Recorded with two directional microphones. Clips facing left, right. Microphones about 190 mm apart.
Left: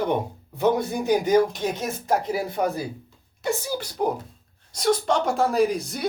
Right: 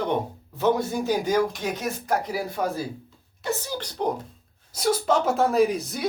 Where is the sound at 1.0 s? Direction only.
20° left (ahead or behind).